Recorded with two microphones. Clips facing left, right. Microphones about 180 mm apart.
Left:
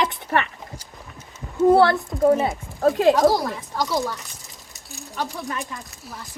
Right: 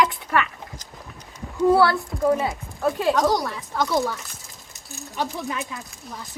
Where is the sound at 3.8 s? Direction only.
Centre (ahead or behind).